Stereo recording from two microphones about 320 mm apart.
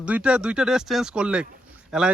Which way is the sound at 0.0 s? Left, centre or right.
Centre.